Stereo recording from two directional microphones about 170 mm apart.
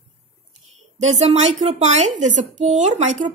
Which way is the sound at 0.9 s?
40° right (ahead or behind).